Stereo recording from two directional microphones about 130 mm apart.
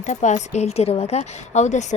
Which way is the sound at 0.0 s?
70° left (ahead or behind).